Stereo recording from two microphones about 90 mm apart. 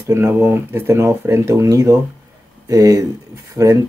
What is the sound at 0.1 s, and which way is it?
Speech, 25° right (ahead or behind).